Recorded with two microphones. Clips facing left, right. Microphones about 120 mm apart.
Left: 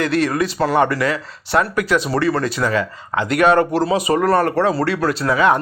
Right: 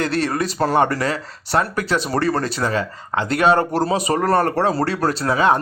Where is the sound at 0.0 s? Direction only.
30° right (ahead or behind).